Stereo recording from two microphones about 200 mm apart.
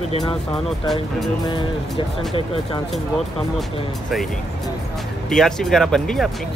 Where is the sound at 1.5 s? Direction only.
25° left (ahead or behind).